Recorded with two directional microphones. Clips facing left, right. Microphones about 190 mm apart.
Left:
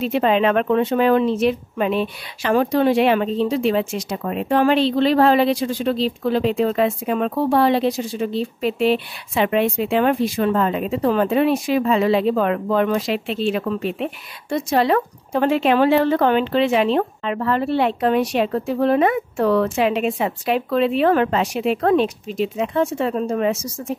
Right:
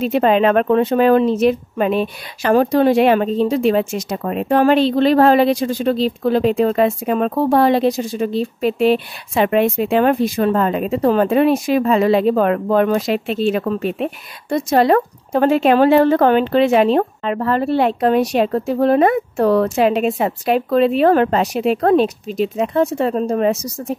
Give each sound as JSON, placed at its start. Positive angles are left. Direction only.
{"t": 0.0, "sound": "speech", "side_deg": -45}